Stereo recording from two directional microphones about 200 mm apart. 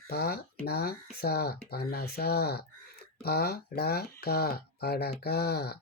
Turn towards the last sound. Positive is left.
turn(degrees=55)  # may be behind; listen again after turning